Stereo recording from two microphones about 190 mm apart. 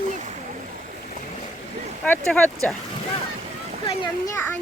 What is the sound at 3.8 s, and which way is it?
Speech, 20° left (ahead or behind).